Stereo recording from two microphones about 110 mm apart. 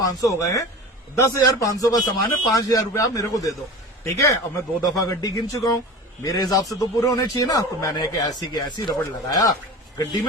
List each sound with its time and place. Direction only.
0.0 s a man's voice: 30° left (ahead or behind)